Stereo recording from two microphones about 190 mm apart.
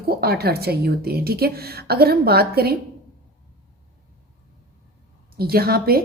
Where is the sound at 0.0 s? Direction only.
55° right (ahead or behind).